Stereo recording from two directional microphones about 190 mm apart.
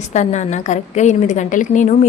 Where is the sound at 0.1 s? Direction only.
40° left (ahead or behind).